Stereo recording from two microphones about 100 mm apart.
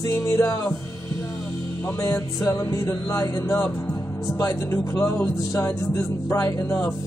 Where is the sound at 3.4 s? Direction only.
20° left (ahead or behind).